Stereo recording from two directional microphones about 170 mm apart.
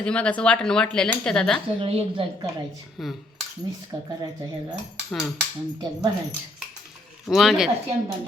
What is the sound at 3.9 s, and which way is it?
Speech, 15° right (ahead or behind).